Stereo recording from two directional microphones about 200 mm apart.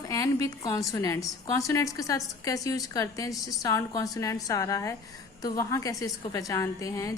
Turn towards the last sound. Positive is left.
turn(degrees=15)  # may be behind; listen again after turning